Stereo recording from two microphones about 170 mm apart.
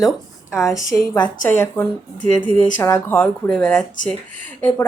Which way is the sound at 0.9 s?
20° left (ahead or behind).